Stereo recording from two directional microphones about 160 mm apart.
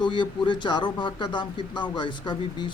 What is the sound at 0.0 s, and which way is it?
Speech, 30° left (ahead or behind).